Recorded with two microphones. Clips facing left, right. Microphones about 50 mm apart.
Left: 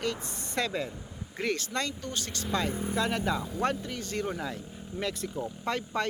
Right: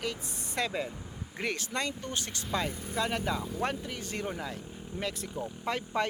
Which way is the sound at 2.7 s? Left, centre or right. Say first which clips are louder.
Left 8 dB; centre.